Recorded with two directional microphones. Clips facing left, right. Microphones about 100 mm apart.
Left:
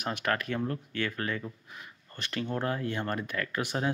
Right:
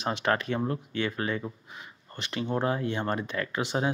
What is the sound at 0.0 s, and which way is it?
Speech, 25° right (ahead or behind).